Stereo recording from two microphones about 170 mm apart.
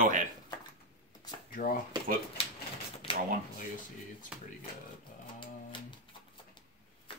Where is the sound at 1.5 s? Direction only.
55° left (ahead or behind).